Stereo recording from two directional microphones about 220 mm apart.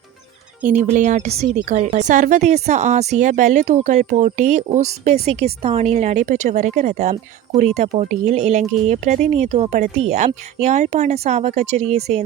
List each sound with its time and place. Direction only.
0.6 s a woman's voice: 35° right (ahead or behind)